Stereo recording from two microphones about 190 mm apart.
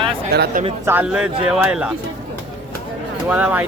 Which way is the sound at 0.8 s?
10° right (ahead or behind).